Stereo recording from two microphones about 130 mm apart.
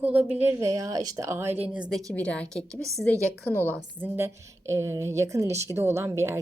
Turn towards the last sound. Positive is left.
turn(degrees=-20)  # may be behind; listen again after turning